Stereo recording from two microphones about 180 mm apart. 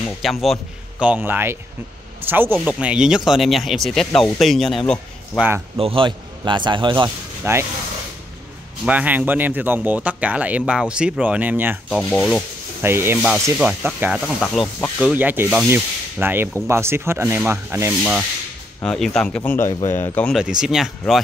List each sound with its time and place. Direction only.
0.0 s speech: centre (ahead or behind)
5.8 s a man's voice: 30° right (ahead or behind)
7.4 s speech: 15° right (ahead or behind)
8.8 s speech: 10° right (ahead or behind)
11.9 s speech: 10° left (ahead or behind)
12.8 s speech: 15° right (ahead or behind)
18.8 s speech: 5° left (ahead or behind)